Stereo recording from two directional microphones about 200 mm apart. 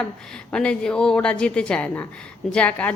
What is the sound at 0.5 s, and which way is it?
A woman's voice, 5° left (ahead or behind).